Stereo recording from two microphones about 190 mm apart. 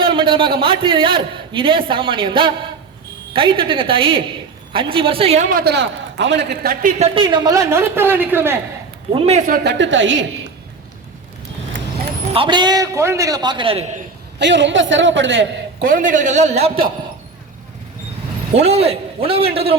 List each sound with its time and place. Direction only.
0.0 s a man's voice: 25° right (ahead or behind); by 6.9 s 55° right (ahead or behind)
7.0 s a woman's voice: 25° right (ahead or behind)
9.1 s a man's voice: 35° right (ahead or behind)
9.5 s a man's voice: 65° right (ahead or behind)
12.3 s a man's voice: 25° right (ahead or behind)
14.3 s a man's voice: 70° right (ahead or behind)
15.8 s a man's voice: 45° right (ahead or behind)
18.5 s a man's voice: 35° right (ahead or behind)